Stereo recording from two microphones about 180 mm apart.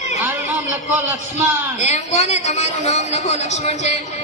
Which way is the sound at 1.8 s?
40° left (ahead or behind).